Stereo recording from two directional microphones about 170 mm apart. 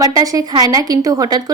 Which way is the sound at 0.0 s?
20° right (ahead or behind).